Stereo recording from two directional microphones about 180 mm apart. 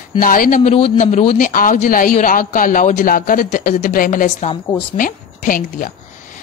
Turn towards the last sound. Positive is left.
turn(degrees=50)  # may be behind; listen again after turning